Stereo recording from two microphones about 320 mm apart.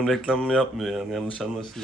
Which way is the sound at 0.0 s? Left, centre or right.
Centre.